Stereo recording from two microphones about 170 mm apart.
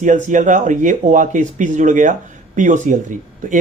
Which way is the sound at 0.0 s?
50° right (ahead or behind).